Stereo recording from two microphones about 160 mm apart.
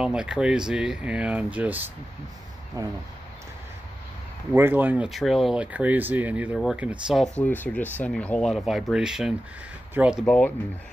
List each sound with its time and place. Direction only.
0.0 s speech: 5° right (ahead or behind)
2.8 s speech: 20° right (ahead or behind)
4.5 s speech: 15° right (ahead or behind)
7.3 s speech: 10° left (ahead or behind); by 10.2 s 5° right (ahead or behind)
10.2 s speech: 5° left (ahead or behind)